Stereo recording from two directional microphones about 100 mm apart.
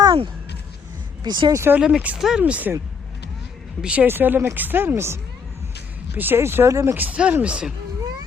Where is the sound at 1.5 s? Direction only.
25° right (ahead or behind).